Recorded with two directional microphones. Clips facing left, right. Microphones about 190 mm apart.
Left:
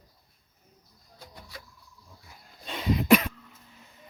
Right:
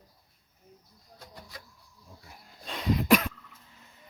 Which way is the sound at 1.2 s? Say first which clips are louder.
Left 1 dB; centre (ahead or behind).